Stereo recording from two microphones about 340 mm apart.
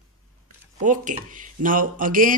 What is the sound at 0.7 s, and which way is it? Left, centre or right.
Speech, right.